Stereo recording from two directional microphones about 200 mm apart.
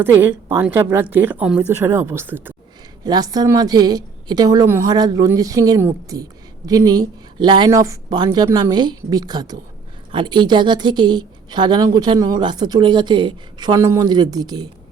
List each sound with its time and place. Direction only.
0.0 s a woman's voice: 10° right (ahead or behind)